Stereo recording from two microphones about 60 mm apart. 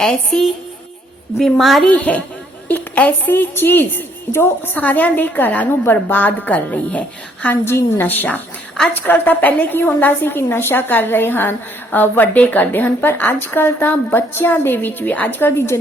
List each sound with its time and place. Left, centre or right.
0.1 s a woman's voice: centre
1.9 s a woman's voice: left
4.7 s a woman's voice: left
7.6 s a woman's voice: left